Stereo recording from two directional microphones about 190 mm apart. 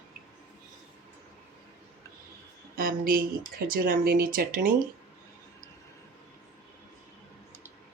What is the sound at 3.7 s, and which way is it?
Speech, 50° right (ahead or behind).